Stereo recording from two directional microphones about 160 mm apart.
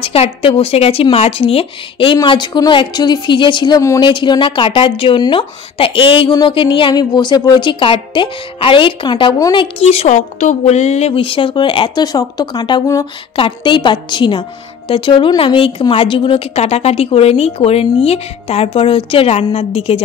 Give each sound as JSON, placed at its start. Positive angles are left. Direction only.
{"t": 0.0, "sound": "speech", "side_deg": 35}